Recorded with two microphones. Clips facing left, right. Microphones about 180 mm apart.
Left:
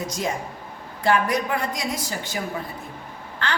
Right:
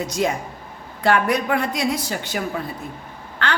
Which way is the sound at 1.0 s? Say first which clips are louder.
Right 2 dB; 65° right (ahead or behind).